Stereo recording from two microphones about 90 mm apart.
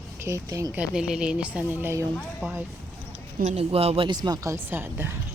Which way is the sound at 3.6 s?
90° right.